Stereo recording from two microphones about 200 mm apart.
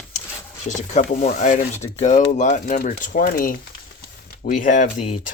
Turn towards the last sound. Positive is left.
turn(degrees=40)  # may be behind; listen again after turning